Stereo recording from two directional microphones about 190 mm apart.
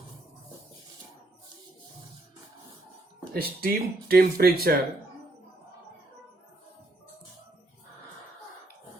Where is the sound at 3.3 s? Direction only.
55° right (ahead or behind).